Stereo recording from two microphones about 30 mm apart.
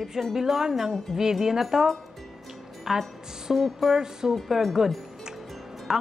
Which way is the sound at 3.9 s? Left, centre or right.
Centre.